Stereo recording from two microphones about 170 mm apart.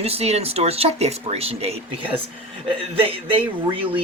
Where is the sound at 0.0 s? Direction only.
35° right (ahead or behind).